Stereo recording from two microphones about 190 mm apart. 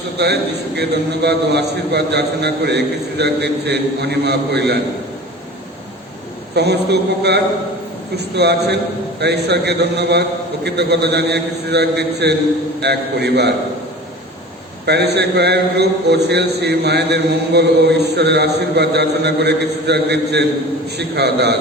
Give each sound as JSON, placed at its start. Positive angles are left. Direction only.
{"t": 0.8, "sound": "a man's voice", "side_deg": -60}
{"t": 6.5, "sound": "a man's voice", "side_deg": -60}
{"t": 14.8, "sound": "a man's voice", "side_deg": -60}